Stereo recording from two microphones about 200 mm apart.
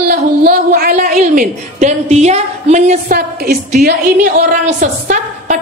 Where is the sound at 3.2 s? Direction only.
50° right (ahead or behind).